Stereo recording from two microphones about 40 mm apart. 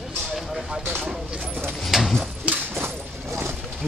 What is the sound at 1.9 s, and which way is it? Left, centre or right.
Pigeon, centre.